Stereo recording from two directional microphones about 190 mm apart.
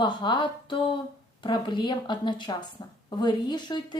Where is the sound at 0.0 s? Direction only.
25° left (ahead or behind).